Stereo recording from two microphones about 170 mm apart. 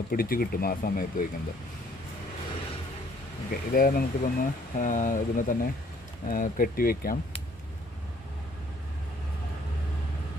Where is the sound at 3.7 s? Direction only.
55° left (ahead or behind).